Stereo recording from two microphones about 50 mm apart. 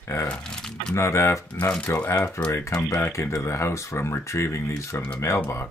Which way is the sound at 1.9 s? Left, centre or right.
Left.